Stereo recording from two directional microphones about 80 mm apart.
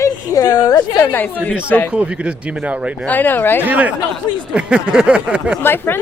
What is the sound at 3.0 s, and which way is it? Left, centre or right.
Speech, left.